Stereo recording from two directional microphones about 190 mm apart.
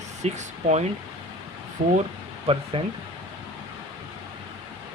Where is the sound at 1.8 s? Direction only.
45° right (ahead or behind).